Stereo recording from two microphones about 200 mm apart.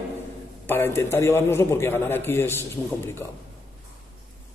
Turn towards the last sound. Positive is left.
turn(degrees=10)  # may be behind; listen again after turning